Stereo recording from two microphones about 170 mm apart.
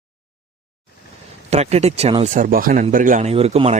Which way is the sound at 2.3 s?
55° right (ahead or behind).